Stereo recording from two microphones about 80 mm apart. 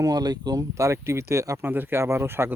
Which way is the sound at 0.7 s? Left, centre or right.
Right.